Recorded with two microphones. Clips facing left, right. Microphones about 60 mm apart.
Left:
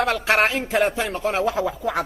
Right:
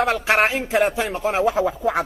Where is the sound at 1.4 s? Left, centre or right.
Centre.